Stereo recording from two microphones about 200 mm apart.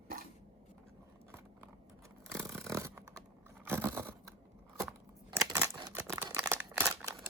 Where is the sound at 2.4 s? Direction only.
15° right (ahead or behind).